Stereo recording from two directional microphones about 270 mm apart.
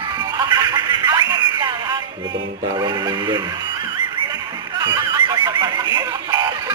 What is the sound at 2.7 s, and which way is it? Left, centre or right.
Speech, centre.